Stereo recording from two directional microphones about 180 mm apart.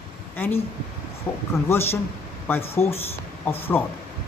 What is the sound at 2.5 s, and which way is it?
A woman's voice, 15° left (ahead or behind).